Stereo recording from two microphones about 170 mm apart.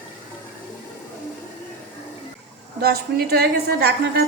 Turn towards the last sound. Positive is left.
turn(degrees=-70)  # may be behind; listen again after turning